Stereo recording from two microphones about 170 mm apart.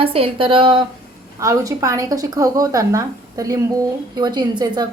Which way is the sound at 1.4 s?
20° right (ahead or behind).